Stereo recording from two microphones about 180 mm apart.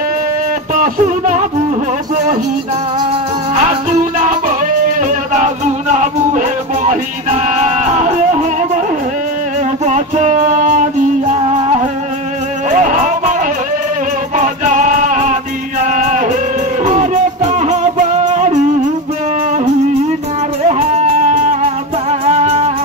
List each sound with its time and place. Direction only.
0.7 s a sound: 45° right (ahead or behind)
3.9 s music: 40° right (ahead or behind)
9.8 s music: 40° right (ahead or behind)
20.6 s music: 35° right (ahead or behind)
22.2 s music: 35° right (ahead or behind)